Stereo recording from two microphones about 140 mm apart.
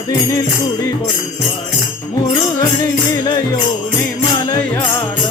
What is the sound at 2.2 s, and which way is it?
Music, 25° left (ahead or behind).